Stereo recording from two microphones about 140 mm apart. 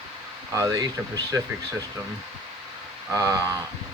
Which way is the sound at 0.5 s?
25° right (ahead or behind).